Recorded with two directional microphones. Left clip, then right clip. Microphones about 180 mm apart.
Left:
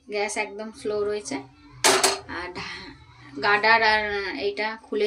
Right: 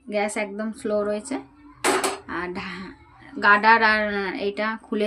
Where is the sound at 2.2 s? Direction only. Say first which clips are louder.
Right 3 dB; 70° right (ahead or behind).